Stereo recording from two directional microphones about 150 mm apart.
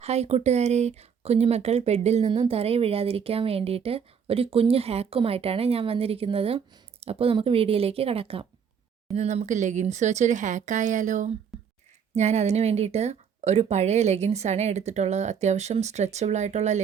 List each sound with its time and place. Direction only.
0.0 s speech: 45° right (ahead or behind)
11.5 s a sound: centre (ahead or behind)
12.1 s speech: 50° right (ahead or behind)